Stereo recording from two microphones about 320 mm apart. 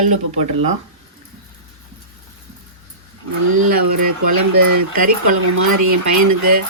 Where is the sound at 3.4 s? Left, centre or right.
Right.